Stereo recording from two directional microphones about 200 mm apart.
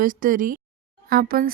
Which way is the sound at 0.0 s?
40° right (ahead or behind).